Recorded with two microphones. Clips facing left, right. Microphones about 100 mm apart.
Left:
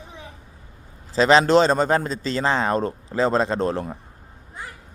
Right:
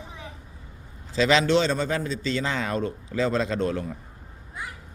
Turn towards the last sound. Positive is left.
turn(degrees=35)  # may be behind; listen again after turning